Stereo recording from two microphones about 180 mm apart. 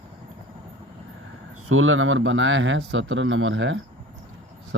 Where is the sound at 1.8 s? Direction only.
90° right.